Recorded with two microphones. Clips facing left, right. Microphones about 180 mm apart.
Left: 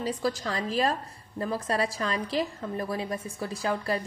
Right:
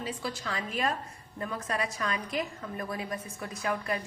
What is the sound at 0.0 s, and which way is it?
A woman's voice, 40° left (ahead or behind).